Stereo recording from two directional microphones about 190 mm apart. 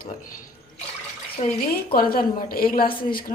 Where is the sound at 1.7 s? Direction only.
50° left (ahead or behind).